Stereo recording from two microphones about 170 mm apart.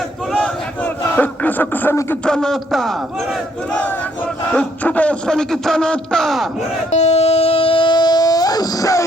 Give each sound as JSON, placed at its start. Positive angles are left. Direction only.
{"t": 1.1, "sound": "a man's voice", "side_deg": 10}
{"t": 6.9, "sound": "music", "side_deg": 40}